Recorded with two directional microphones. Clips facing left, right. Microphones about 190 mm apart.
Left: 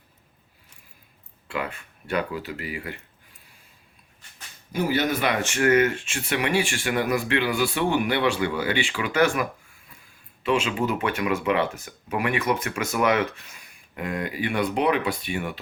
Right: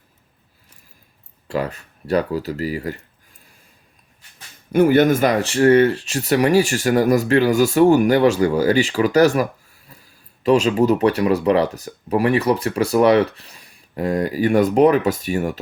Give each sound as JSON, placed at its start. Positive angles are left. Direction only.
{"t": 1.5, "sound": "speech", "side_deg": -40}
{"t": 4.7, "sound": "speech", "side_deg": -55}